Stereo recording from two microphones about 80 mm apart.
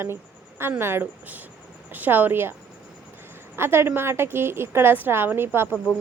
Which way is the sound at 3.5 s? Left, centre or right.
Right.